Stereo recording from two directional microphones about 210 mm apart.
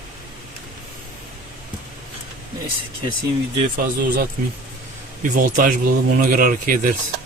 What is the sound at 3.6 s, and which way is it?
Speech, 40° right (ahead or behind).